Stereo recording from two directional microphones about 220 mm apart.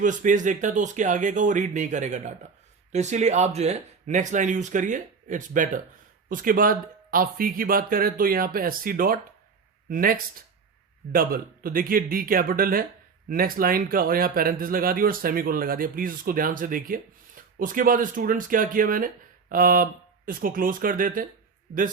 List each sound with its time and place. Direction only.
0.0 s speech: 35° right (ahead or behind)